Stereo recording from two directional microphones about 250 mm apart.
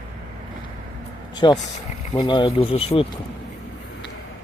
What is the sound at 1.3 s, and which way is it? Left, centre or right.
Speech, centre.